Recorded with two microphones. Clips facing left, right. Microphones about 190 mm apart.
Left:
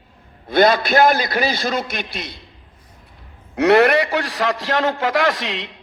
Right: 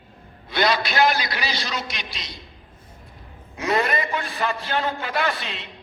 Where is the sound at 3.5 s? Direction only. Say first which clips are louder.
Left 10 dB; 75° left (ahead or behind); by 5.7 s 90° left.